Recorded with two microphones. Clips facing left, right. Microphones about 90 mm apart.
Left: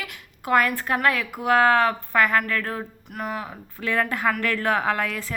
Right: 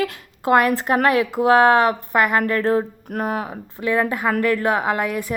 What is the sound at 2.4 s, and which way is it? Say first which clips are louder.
Speech: right 9 dB; 30° right (ahead or behind).